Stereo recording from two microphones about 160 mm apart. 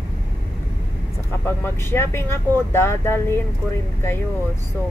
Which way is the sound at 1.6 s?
15° left (ahead or behind).